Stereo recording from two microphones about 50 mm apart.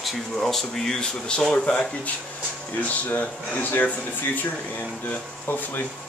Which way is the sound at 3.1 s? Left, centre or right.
Left.